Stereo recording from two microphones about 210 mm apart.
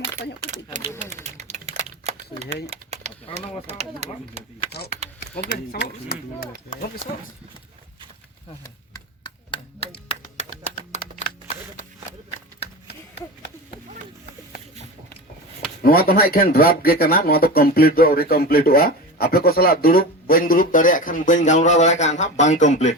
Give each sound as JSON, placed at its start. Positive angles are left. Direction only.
{"t": 0.4, "sound": "speech", "side_deg": -35}
{"t": 1.1, "sound": "typing", "side_deg": -30}
{"t": 3.7, "sound": "speech", "side_deg": -30}
{"t": 5.5, "sound": "speech", "side_deg": 50}
{"t": 8.6, "sound": "chopping", "side_deg": 20}
{"t": 15.8, "sound": "speech", "side_deg": 45}